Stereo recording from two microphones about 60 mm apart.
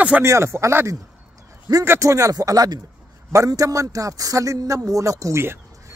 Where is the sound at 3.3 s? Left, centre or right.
Right.